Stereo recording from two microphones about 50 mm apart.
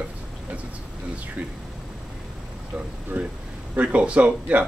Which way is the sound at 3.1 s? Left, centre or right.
Right.